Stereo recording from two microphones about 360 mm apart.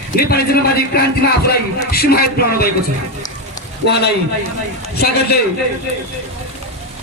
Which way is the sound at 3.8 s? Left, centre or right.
Left.